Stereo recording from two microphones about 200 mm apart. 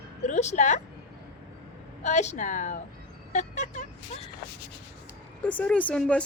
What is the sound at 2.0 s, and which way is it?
Speech, 35° left (ahead or behind).